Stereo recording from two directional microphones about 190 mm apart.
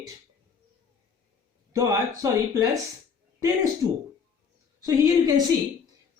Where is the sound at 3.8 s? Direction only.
20° right (ahead or behind).